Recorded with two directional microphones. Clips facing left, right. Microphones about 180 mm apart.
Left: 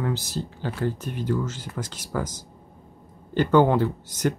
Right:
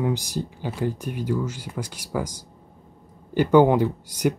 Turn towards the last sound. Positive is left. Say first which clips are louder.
# right 2 dB
turn(degrees=-10)  # may be behind; listen again after turning